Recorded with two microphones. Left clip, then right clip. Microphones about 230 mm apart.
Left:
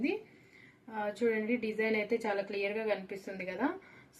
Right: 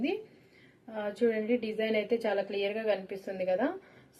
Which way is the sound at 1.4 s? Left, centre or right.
Centre.